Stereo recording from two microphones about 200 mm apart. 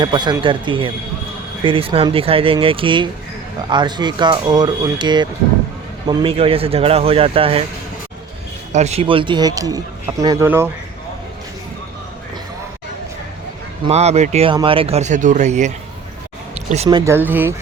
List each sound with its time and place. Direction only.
0.0 s speech: 20° right (ahead or behind)
8.7 s speech: 35° right (ahead or behind); by 10.7 s 10° right (ahead or behind)
13.8 s speech: 30° right (ahead or behind)
16.6 s a sound: 30° right (ahead or behind)
16.9 s speech: 10° right (ahead or behind)